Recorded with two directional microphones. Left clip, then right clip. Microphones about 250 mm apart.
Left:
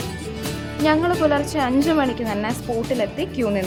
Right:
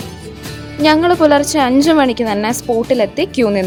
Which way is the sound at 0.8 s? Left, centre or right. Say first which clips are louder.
Right 8 dB; right.